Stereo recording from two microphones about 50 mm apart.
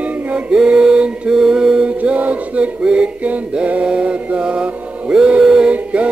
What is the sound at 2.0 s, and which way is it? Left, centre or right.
Music, right.